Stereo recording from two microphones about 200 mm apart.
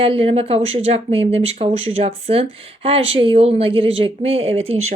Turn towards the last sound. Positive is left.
turn(degrees=-30)  # may be behind; listen again after turning